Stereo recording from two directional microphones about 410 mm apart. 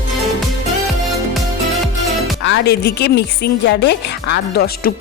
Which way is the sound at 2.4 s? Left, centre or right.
Left.